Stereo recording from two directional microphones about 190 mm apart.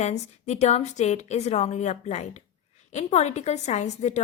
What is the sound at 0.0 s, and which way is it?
A woman's voice, 35° left (ahead or behind).